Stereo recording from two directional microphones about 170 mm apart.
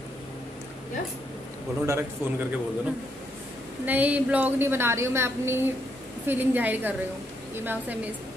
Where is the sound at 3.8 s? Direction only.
10° right (ahead or behind).